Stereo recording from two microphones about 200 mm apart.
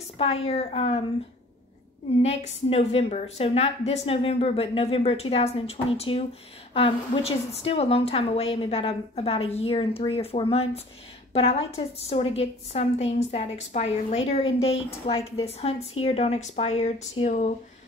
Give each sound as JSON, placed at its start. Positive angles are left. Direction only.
{"t": 0.5, "sound": "a woman's voice", "side_deg": 30}
{"t": 2.2, "sound": "a woman's voice", "side_deg": 35}